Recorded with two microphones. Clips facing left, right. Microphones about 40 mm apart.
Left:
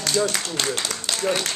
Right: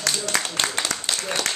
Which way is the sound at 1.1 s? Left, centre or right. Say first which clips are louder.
Even; centre.